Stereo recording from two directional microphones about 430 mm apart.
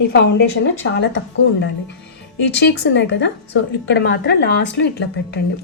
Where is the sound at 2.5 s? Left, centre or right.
Left.